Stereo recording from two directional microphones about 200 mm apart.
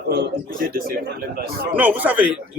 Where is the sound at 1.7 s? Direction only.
10° right (ahead or behind).